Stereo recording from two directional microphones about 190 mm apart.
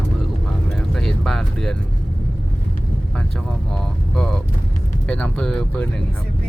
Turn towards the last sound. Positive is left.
turn(degrees=5)  # may be behind; listen again after turning